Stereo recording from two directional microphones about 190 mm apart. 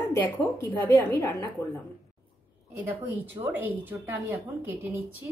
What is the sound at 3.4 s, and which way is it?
A woman's voice, 10° right (ahead or behind).